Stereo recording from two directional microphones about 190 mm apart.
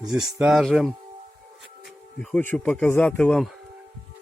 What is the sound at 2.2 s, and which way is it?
Speech, 5° left (ahead or behind).